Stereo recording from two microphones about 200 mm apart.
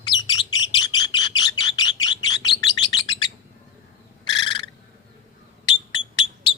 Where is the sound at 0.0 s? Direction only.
20° left (ahead or behind).